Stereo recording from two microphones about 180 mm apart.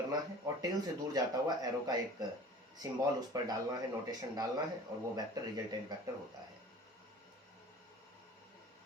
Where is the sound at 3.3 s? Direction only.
20° right (ahead or behind).